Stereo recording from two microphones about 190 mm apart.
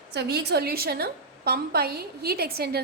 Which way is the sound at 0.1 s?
60° right (ahead or behind).